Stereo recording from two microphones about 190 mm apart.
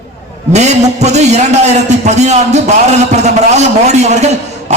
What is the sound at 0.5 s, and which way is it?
A man's voice, 35° right (ahead or behind).